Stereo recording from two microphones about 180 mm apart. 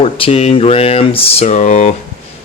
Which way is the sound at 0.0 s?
35° left (ahead or behind).